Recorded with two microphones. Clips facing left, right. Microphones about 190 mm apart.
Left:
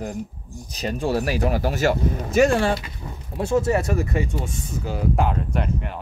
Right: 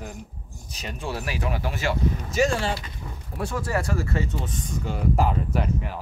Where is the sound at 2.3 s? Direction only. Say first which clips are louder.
Left 7 dB; 55° left (ahead or behind).